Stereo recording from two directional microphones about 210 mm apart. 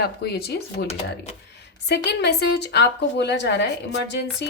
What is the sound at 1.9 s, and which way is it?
A woman's voice, 50° left (ahead or behind).